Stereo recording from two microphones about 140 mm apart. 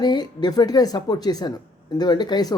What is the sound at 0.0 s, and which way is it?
Speech, 30° left (ahead or behind).